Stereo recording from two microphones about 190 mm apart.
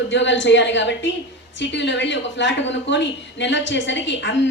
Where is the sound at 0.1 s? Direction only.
70° left (ahead or behind).